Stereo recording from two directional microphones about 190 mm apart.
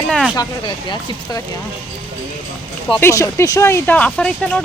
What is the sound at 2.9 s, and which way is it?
Speech, 15° left (ahead or behind).